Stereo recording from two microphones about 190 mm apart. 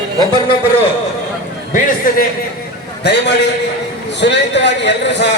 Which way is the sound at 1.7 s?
45° left (ahead or behind).